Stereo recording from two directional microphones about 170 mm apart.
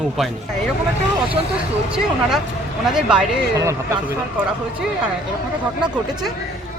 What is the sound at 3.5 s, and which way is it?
Speech, 15° right (ahead or behind).